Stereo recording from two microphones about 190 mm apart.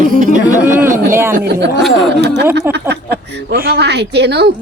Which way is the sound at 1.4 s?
60° right (ahead or behind).